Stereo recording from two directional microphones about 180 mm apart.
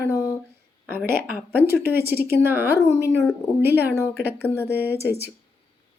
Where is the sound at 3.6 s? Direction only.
10° right (ahead or behind).